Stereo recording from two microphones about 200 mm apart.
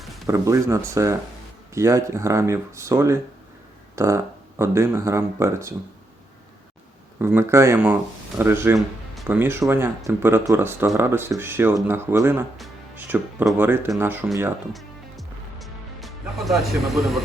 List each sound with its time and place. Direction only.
0.3 s speech: 15° right (ahead or behind)
7.2 s speech: 10° right (ahead or behind)
14.7 s music: centre (ahead or behind)